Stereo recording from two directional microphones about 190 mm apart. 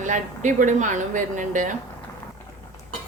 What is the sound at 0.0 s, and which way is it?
A woman's voice, 40° right (ahead or behind).